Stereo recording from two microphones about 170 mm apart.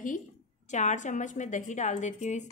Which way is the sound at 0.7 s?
45° left (ahead or behind).